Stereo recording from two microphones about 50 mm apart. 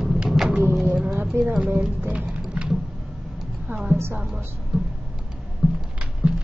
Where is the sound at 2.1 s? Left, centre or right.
Right.